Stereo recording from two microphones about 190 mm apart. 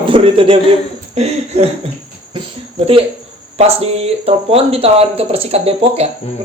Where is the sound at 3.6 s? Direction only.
30° right (ahead or behind).